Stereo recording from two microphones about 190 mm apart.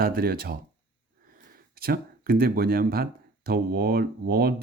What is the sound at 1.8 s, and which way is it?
Speech, 50° right (ahead or behind).